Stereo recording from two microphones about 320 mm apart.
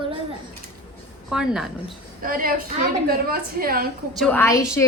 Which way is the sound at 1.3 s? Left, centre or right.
Centre.